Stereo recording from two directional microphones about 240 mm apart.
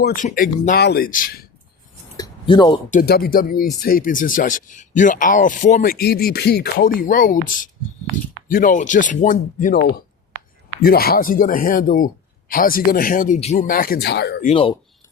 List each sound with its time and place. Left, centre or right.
0.0 s speech: left
2.1 s a sound: centre
2.9 s speech: left
14.4 s speech: left